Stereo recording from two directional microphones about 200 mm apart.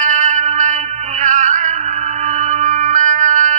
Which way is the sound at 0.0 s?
40° right (ahead or behind).